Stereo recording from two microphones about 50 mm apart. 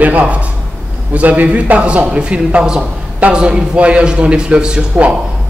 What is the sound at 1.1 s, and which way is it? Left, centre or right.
A man's voice, right.